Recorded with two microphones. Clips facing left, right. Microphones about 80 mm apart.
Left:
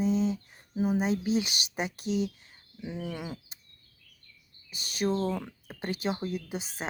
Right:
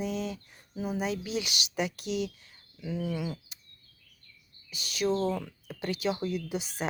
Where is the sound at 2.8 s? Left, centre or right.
Left.